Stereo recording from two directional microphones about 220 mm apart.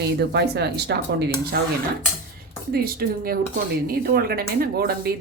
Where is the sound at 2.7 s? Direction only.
45° right (ahead or behind).